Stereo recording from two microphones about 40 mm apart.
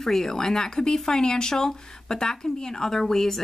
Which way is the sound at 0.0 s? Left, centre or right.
Centre.